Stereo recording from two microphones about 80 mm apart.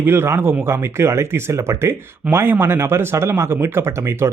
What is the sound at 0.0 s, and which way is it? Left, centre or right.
Speech, right.